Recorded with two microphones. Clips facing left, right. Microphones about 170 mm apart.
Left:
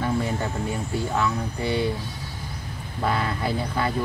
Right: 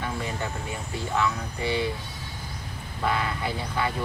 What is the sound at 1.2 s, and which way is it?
Speech, 35° left (ahead or behind).